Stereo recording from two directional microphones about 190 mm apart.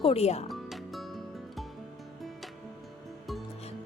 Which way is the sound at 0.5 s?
Centre (ahead or behind).